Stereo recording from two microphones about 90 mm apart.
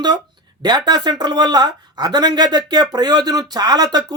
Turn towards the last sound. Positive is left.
turn(degrees=-50)  # may be behind; listen again after turning